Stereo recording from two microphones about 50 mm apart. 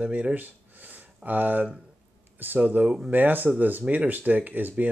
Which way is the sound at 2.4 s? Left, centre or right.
Right.